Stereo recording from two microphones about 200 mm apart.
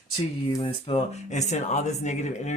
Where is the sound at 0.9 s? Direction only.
35° left (ahead or behind).